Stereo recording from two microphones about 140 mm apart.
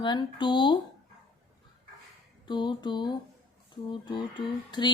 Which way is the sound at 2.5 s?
35° left (ahead or behind).